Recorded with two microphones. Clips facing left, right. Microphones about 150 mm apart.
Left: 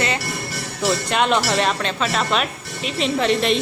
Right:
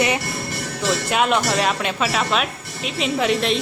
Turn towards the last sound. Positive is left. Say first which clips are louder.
# left 1 dB
turn(degrees=0)  # may be behind; listen again after turning